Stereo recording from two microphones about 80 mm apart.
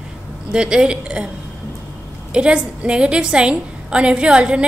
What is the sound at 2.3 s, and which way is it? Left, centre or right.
A woman's voice, centre.